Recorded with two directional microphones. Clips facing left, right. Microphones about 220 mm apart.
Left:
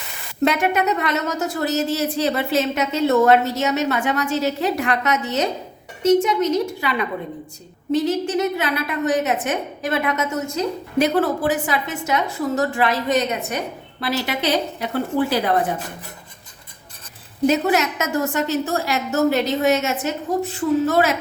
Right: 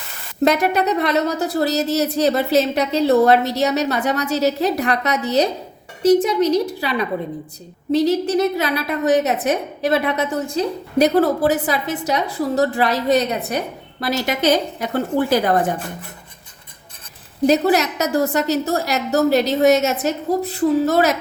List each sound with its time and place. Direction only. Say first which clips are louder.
0.4 s a woman's voice: right 2 dB; 35° right (ahead or behind)
7.9 s a woman's voice: right 3 dB; 35° right (ahead or behind)
17.4 s a woman's voice: right 2 dB; 35° right (ahead or behind)